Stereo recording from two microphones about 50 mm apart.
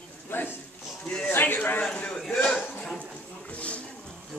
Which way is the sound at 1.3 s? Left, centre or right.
Left.